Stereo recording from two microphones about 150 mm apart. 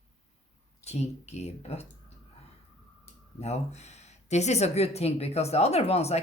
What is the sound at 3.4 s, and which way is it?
Speech, 45° left (ahead or behind).